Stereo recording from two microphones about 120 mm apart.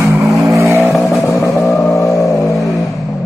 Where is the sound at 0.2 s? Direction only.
Centre (ahead or behind).